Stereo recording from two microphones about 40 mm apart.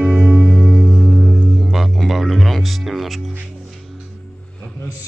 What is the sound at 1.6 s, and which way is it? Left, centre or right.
Music, centre.